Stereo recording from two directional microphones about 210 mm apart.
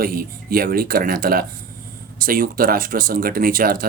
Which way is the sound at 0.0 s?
45° right (ahead or behind).